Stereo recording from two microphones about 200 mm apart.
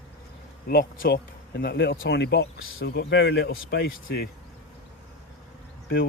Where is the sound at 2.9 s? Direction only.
60° left (ahead or behind).